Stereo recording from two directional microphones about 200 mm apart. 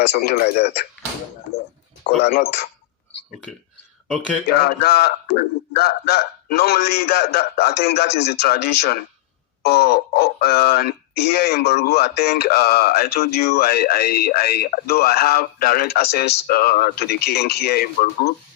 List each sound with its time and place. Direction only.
0.0 s speech: 50° left (ahead or behind)
2.2 s speech: 55° left (ahead or behind)
4.4 s speech: 50° left (ahead or behind)